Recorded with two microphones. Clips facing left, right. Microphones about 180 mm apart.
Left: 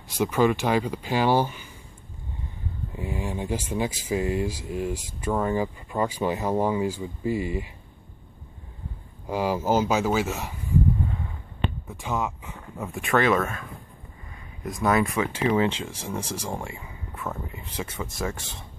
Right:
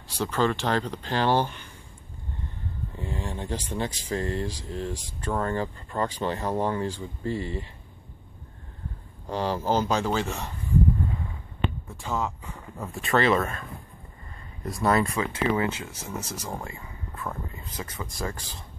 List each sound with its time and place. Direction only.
0.1 s speech: 10° left (ahead or behind)
2.9 s speech: 10° left (ahead or behind)
9.3 s speech: 10° left (ahead or behind)
12.0 s speech: 15° left (ahead or behind)
12.4 s a sound: centre (ahead or behind)
13.1 s speech: centre (ahead or behind)
15.0 s speech: 15° left (ahead or behind)
16.4 s a sound: 20° left (ahead or behind)
17.9 s speech: 25° left (ahead or behind)